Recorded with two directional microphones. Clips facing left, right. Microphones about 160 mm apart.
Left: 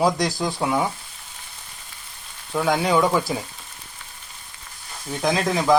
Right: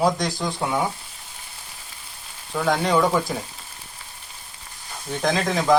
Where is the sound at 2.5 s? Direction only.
5° left (ahead or behind).